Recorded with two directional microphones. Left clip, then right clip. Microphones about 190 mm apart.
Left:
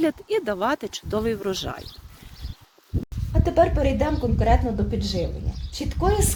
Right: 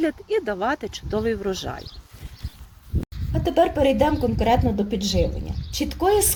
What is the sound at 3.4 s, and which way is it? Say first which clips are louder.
Speech: right 1 dB; 5° right (ahead or behind).